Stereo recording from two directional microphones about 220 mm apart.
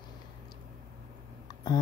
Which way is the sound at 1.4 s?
20° left (ahead or behind).